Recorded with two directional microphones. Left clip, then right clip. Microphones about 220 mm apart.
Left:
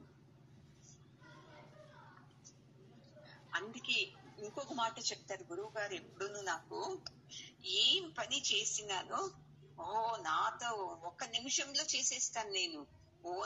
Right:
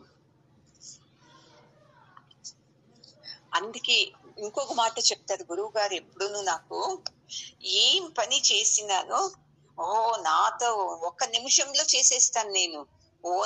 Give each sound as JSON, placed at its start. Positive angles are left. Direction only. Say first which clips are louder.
{"t": 3.3, "sound": "a woman's voice", "louder": "right 12 dB", "side_deg": -45}